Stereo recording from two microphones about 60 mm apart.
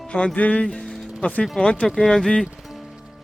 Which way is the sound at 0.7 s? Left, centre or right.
Centre.